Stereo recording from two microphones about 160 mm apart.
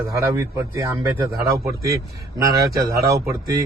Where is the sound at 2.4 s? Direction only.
20° right (ahead or behind).